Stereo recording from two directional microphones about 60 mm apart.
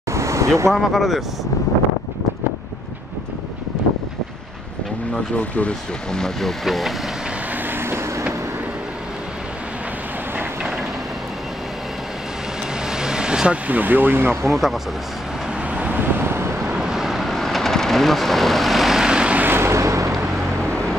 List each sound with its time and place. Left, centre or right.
0.1 s vehicle: right
0.7 s speech: centre
5.1 s speech: left
6.1 s speech: centre
7.6 s vehicle: right
12.8 s vehicle: centre
13.7 s speech: right
14.5 s speech: centre
15.7 s vehicle: right
16.6 s vehicle: centre
19.4 s vehicle: right